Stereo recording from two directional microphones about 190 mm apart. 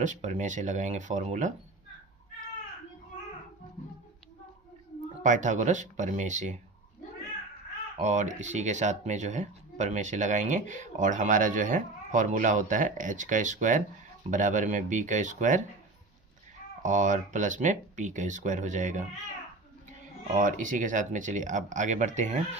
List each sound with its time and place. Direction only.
0.0 s speech: 40° right (ahead or behind)
5.2 s speech: 40° right (ahead or behind)
8.0 s speech: 40° right (ahead or behind)
16.8 s speech: 40° right (ahead or behind)
20.3 s speech: 45° right (ahead or behind)